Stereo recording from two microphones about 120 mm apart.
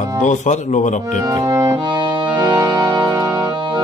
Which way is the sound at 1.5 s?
25° right (ahead or behind).